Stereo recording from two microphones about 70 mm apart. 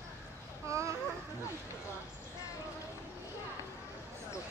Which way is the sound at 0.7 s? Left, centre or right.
Right.